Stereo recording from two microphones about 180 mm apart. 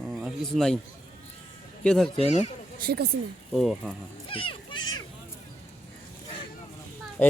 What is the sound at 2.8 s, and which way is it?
Speech, 60° right (ahead or behind).